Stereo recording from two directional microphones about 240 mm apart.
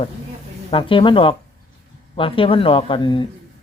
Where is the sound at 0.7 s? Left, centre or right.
Left.